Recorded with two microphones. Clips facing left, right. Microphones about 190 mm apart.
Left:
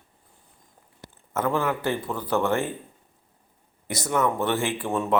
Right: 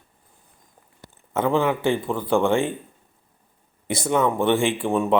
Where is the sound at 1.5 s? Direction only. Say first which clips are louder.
Right 6 dB; 25° right (ahead or behind).